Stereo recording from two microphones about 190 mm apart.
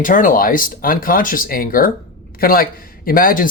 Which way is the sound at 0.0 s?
45° left (ahead or behind).